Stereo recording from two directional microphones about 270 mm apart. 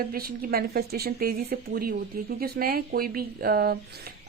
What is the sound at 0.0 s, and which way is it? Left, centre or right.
A woman's voice, right.